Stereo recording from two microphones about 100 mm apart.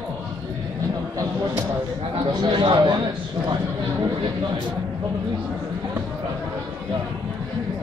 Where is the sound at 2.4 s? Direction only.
50° right (ahead or behind).